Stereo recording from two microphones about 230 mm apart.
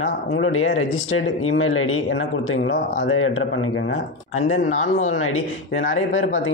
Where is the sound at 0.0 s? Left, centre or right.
Left.